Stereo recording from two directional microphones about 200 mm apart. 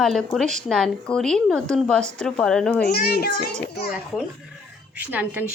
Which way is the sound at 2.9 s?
50° left (ahead or behind).